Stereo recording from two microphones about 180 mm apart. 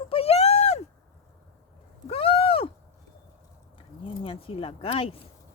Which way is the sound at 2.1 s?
30° left (ahead or behind).